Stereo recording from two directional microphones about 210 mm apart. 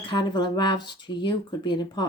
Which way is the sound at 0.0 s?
25° left (ahead or behind).